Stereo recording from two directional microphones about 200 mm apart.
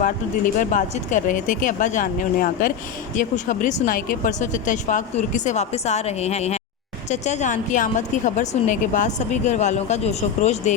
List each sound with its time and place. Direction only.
0.6 s a woman's voice: 40° left (ahead or behind)